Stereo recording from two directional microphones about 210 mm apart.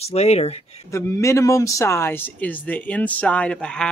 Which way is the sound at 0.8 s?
15° left (ahead or behind).